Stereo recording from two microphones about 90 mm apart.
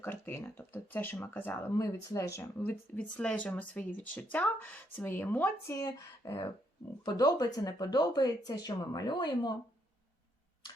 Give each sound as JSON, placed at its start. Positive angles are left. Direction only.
{"t": 0.0, "sound": "speech", "side_deg": 20}
{"t": 1.8, "sound": "speech", "side_deg": 35}
{"t": 2.4, "sound": "speech", "side_deg": 20}
{"t": 5.7, "sound": "speech", "side_deg": 40}